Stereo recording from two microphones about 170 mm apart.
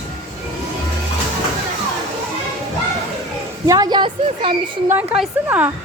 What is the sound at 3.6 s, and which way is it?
Speech, 20° right (ahead or behind).